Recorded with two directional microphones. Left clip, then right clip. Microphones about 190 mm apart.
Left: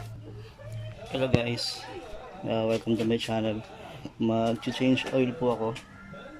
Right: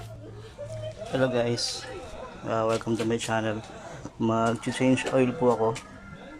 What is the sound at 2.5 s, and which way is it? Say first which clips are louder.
Speech: right 1 dB; 15° left (ahead or behind).